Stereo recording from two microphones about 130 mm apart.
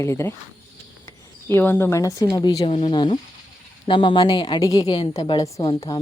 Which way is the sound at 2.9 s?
35° left (ahead or behind).